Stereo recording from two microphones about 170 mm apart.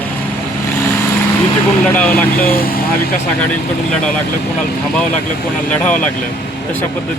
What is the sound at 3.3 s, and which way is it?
Speech, 5° left (ahead or behind).